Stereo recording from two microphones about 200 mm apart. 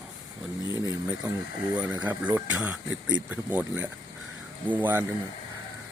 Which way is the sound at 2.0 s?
5° right (ahead or behind).